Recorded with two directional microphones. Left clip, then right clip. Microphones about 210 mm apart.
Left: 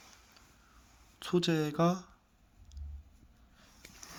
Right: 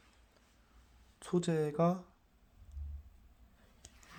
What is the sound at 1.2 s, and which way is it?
Speech, 5° right (ahead or behind).